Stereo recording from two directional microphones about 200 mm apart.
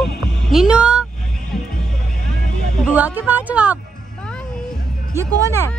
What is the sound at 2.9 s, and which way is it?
Speech, 10° right (ahead or behind).